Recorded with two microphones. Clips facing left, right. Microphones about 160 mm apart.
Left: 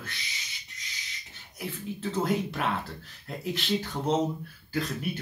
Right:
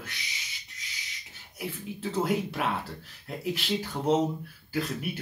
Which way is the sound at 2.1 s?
10° right (ahead or behind).